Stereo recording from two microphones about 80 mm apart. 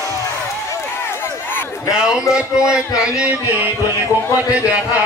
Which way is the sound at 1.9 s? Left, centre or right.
Centre.